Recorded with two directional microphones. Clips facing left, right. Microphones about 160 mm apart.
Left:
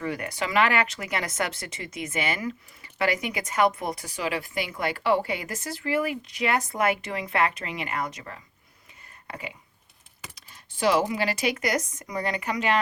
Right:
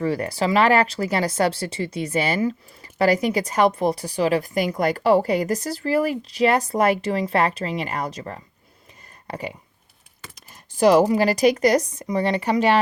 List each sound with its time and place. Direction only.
0.0 s speech: 35° right (ahead or behind)
10.5 s speech: 40° right (ahead or behind)